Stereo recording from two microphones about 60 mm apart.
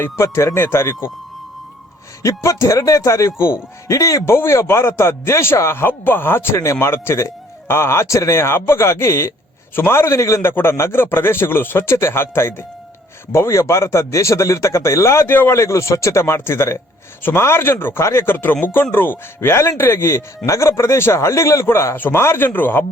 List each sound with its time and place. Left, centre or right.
0.0 s speech: left
2.2 s speech: left
3.8 s speech: left
4.4 s speech: left
10.4 s a man's voice: left
13.3 s speech: left
15.3 s a man's voice: left
15.5 s a man's voice: left
19.5 s speech: left
21.9 s a man's voice: left